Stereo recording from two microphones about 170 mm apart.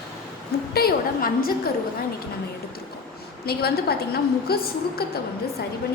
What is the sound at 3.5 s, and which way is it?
A woman's voice, 65° left (ahead or behind).